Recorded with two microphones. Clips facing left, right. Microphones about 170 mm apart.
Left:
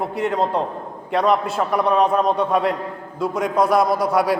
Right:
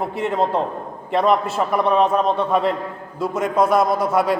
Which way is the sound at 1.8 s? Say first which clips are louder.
Even; centre (ahead or behind).